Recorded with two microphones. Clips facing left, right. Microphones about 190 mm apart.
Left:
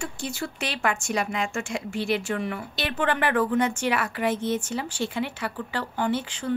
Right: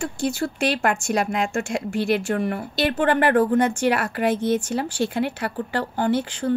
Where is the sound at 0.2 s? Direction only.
40° right (ahead or behind).